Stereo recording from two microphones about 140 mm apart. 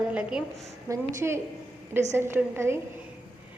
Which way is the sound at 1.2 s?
20° right (ahead or behind).